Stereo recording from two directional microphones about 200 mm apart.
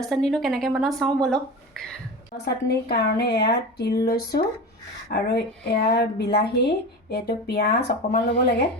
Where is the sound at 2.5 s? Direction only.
55° left (ahead or behind).